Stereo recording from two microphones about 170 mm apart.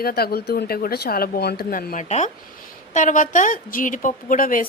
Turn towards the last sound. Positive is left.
turn(degrees=55)  # may be behind; listen again after turning